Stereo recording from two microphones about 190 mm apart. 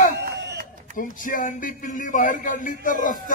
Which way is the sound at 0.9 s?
45° left (ahead or behind).